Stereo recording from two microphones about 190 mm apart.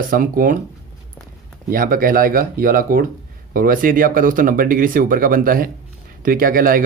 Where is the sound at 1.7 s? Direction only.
50° right (ahead or behind).